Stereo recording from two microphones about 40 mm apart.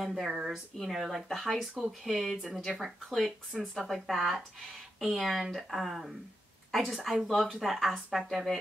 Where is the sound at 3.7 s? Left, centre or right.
Centre.